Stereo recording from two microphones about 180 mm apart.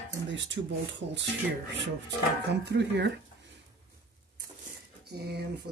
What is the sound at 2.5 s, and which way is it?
Speech, 70° right (ahead or behind).